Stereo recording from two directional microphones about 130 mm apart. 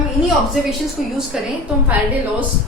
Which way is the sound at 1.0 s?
Centre (ahead or behind).